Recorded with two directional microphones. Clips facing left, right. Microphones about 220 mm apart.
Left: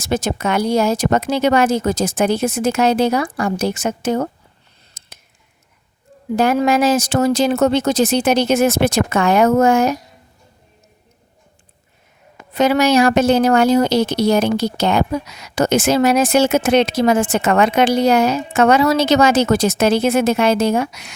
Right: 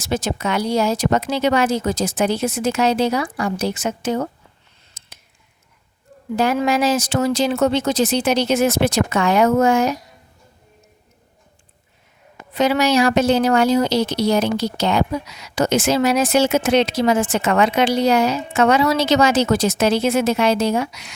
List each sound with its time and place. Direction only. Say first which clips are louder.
0.0 s a woman's voice: left 3 dB; 50° left (ahead or behind)
5.0 s a sound: left 1 dB; 45° left (ahead or behind)
6.3 s a woman's voice: left 3 dB; 50° left (ahead or behind)
12.5 s a woman's voice: left 3 dB; 50° left (ahead or behind)